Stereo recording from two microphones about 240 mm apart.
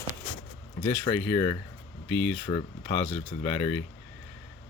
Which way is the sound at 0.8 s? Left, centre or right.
Centre.